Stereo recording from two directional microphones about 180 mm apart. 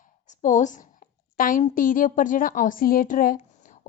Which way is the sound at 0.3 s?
45° left (ahead or behind).